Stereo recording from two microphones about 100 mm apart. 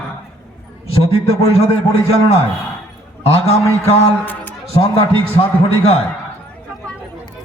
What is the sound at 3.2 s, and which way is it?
Speech, 90° left.